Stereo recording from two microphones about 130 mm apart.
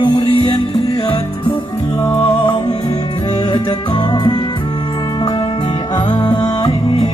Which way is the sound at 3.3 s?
35° left (ahead or behind).